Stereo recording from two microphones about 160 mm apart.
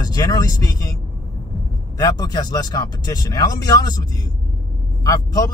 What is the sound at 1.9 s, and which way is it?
Speech, 20° left (ahead or behind).